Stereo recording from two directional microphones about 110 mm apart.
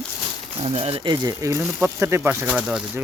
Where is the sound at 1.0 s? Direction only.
40° right (ahead or behind).